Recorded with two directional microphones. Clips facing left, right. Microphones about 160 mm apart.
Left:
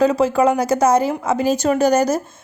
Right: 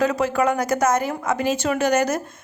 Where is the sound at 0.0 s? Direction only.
30° left (ahead or behind).